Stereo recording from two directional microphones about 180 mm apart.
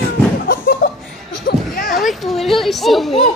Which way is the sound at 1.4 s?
55° left (ahead or behind).